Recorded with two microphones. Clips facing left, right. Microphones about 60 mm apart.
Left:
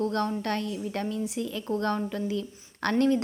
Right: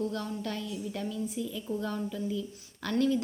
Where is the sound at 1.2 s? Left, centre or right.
Left.